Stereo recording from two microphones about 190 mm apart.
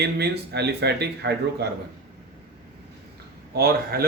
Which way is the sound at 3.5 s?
55° right (ahead or behind).